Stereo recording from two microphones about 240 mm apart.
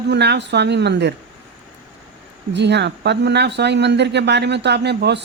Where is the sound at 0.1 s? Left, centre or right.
Right.